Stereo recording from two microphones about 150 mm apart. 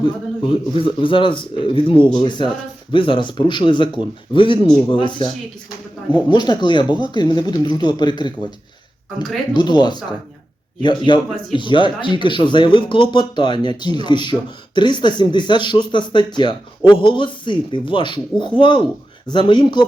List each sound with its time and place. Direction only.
0.0 s speech: 35° left (ahead or behind)
6.3 s speech: 30° left (ahead or behind)